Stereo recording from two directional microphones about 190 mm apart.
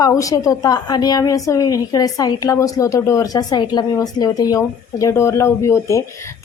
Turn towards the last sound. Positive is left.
turn(degrees=15)  # may be behind; listen again after turning